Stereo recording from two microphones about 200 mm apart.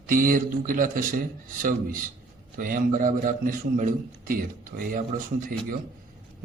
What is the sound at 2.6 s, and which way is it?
A man's voice, 45° right (ahead or behind).